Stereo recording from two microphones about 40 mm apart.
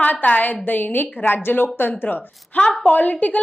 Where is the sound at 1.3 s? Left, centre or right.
Left.